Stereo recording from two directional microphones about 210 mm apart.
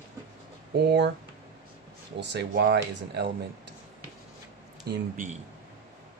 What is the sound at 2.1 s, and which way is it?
Speech, 55° right (ahead or behind).